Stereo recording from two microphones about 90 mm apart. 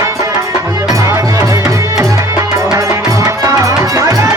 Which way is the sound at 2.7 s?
35° right (ahead or behind).